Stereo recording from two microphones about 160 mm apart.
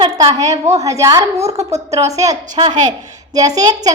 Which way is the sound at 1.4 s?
40° right (ahead or behind).